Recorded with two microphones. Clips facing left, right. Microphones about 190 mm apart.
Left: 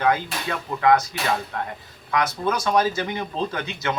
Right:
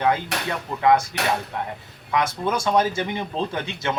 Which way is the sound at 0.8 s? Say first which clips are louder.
Even; 25° right (ahead or behind).